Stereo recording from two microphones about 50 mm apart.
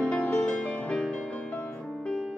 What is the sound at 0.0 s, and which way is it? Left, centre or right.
Music, left.